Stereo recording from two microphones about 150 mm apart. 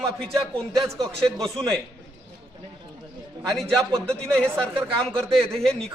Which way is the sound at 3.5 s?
5° left (ahead or behind).